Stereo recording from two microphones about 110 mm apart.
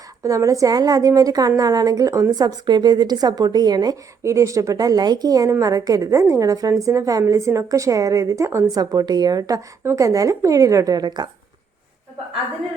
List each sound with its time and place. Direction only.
0.2 s a woman's voice: 30° right (ahead or behind)
4.2 s a woman's voice: 25° right (ahead or behind)